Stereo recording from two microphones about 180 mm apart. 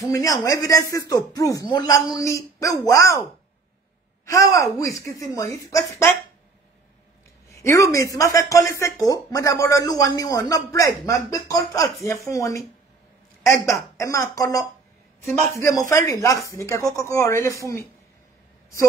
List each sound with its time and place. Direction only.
0.0 s speech: 20° left (ahead or behind)
4.3 s speech: 20° left (ahead or behind)
7.4 s speech: 15° left (ahead or behind)